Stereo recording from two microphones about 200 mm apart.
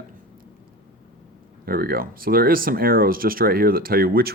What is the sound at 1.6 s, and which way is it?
Speech, 50° right (ahead or behind).